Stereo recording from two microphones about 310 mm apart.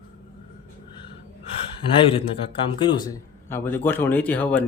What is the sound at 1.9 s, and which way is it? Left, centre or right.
Speech, centre.